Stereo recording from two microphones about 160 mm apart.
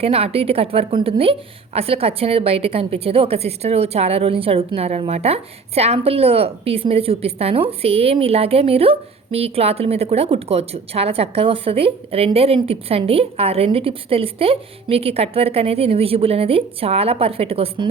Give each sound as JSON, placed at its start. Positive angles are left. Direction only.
{"t": 0.0, "sound": "speech", "side_deg": -40}